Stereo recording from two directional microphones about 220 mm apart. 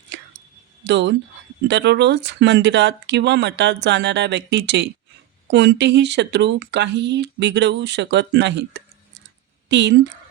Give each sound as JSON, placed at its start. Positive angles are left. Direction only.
{"t": 0.9, "sound": "speech", "side_deg": -50}